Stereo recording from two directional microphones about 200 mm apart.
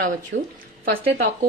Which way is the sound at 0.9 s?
50° right (ahead or behind).